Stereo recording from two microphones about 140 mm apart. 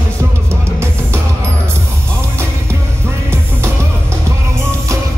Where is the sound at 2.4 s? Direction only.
20° right (ahead or behind).